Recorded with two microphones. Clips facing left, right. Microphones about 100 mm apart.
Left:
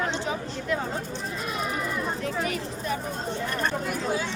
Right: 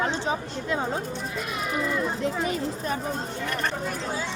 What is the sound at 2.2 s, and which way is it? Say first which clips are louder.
Speech: right 2 dB; 25° right (ahead or behind).